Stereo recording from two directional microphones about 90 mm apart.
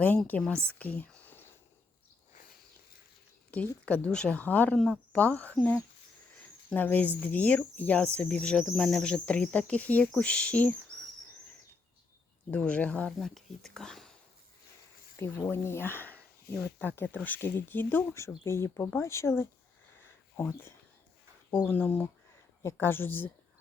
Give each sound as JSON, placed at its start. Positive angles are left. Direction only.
{"t": 0.3, "sound": "speech", "side_deg": 15}
{"t": 0.5, "sound": "speech", "side_deg": -30}
{"t": 0.8, "sound": "whispering", "side_deg": 15}
{"t": 3.8, "sound": "speech", "side_deg": 15}
{"t": 6.7, "sound": "speech", "side_deg": 20}
{"t": 12.5, "sound": "speech", "side_deg": 15}
{"t": 13.1, "sound": "speech", "side_deg": 0}
{"t": 15.2, "sound": "speech", "side_deg": 20}